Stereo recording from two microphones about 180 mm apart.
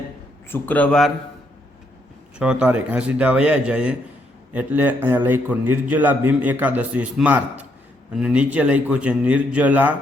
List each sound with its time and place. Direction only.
0.5 s speech: 10° left (ahead or behind)
2.4 s a man's voice: 5° right (ahead or behind)